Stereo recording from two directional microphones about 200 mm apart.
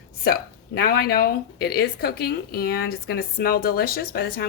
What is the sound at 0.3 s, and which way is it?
Speech, 50° left (ahead or behind).